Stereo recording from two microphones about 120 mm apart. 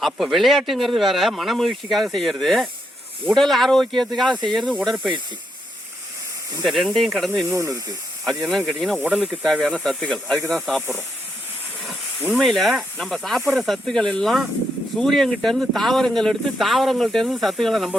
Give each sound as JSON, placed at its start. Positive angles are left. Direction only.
{"t": 0.0, "sound": "speech", "side_deg": 0}
{"t": 6.7, "sound": "speech", "side_deg": 0}
{"t": 7.4, "sound": "speech", "side_deg": -25}
{"t": 8.2, "sound": "speech", "side_deg": 0}
{"t": 9.0, "sound": "speech", "side_deg": -10}
{"t": 9.4, "sound": "speech", "side_deg": 5}
{"t": 12.3, "sound": "speech", "side_deg": 0}